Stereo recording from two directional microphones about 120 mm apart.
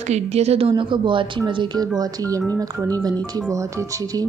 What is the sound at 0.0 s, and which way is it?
A woman's voice, 65° right (ahead or behind).